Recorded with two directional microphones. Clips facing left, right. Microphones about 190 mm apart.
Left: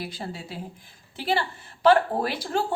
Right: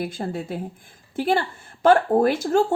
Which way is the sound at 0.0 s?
50° right (ahead or behind).